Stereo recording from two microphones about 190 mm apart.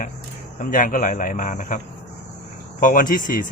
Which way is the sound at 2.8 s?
45° left (ahead or behind).